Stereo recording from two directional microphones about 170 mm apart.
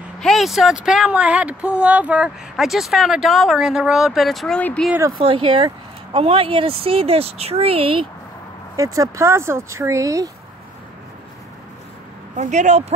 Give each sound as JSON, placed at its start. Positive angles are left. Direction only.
{"t": 0.2, "sound": "speech", "side_deg": 0}
{"t": 5.1, "sound": "speech", "side_deg": -30}
{"t": 8.7, "sound": "speech", "side_deg": -20}
{"t": 12.4, "sound": "speech", "side_deg": -45}